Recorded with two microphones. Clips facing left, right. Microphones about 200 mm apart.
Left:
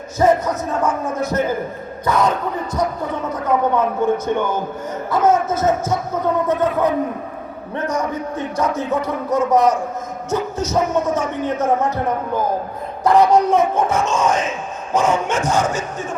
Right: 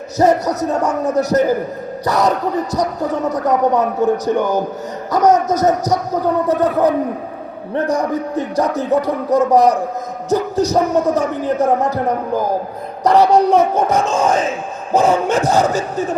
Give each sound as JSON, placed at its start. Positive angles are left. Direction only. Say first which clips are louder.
{"t": 0.2, "sound": "a man's voice", "louder": "right 2 dB", "side_deg": -40}